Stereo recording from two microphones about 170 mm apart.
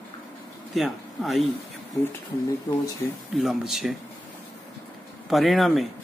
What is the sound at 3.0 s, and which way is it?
Speech, 15° left (ahead or behind).